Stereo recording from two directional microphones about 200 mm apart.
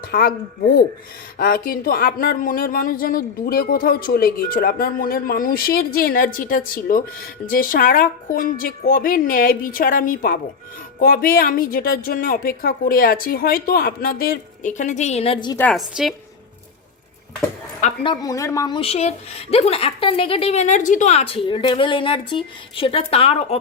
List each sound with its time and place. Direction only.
0.1 s speech: 50° left (ahead or behind); by 15.5 s 25° left (ahead or behind)
15.5 s a woman's voice: 5° left (ahead or behind)
18.0 s a woman's voice: 20° left (ahead or behind)